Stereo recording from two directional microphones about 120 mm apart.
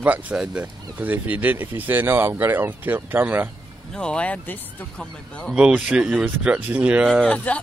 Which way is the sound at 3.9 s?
5° left (ahead or behind).